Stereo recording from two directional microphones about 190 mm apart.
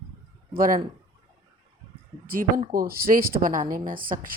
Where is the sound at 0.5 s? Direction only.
50° right (ahead or behind).